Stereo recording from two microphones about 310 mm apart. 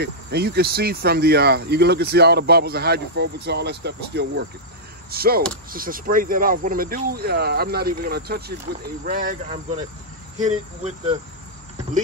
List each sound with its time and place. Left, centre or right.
0.0 s speech: right